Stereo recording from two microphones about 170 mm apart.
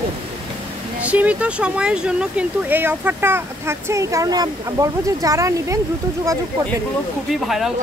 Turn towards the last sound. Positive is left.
turn(degrees=0)  # may be behind; listen again after turning